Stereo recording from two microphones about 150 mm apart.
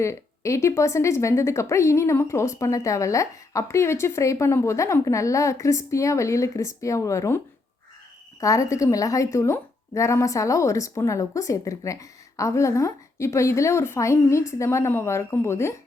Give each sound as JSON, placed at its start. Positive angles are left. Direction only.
{"t": 0.0, "sound": "a woman's voice", "side_deg": 20}